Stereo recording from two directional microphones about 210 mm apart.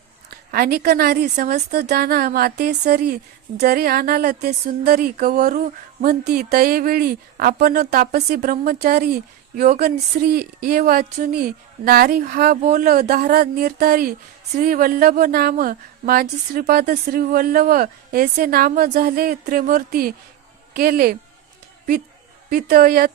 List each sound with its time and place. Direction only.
0.5 s speech: 45° right (ahead or behind)
22.4 s speech: 45° right (ahead or behind)